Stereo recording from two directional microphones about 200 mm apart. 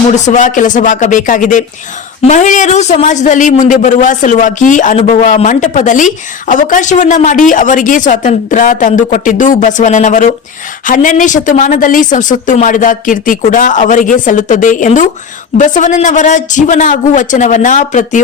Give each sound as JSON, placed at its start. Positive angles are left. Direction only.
{"t": 0.3, "sound": "a man's voice", "side_deg": 40}